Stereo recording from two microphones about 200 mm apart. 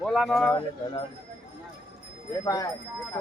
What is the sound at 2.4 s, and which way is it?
Speech, 15° left (ahead or behind).